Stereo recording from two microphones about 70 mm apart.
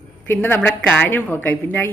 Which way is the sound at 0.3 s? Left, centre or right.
Left.